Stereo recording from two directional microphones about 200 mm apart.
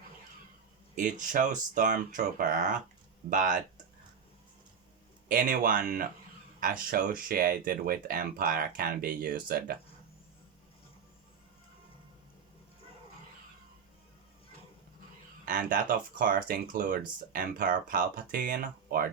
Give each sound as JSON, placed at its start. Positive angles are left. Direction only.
{"t": 1.3, "sound": "speech", "side_deg": -40}
{"t": 5.3, "sound": "speech", "side_deg": -45}
{"t": 15.4, "sound": "speech", "side_deg": -45}